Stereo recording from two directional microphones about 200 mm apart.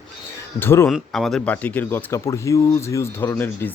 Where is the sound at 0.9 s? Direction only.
Centre (ahead or behind).